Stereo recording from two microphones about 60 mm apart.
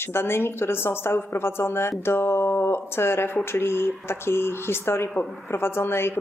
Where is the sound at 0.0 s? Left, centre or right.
Left.